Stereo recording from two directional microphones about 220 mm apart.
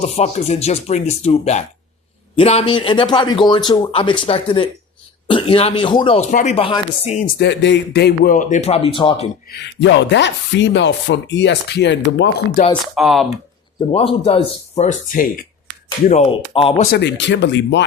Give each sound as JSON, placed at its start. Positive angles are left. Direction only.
{"t": 0.0, "sound": "speech", "side_deg": 30}
{"t": 7.3, "sound": "speech", "side_deg": 50}
{"t": 9.5, "sound": "speech", "side_deg": 50}
{"t": 12.8, "sound": "speech", "side_deg": 0}
{"t": 13.9, "sound": "speech", "side_deg": 25}
{"t": 16.0, "sound": "speech", "side_deg": 30}
{"t": 17.0, "sound": "speech", "side_deg": 55}